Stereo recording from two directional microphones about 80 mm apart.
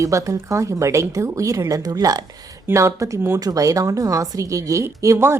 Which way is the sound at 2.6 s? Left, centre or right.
Right.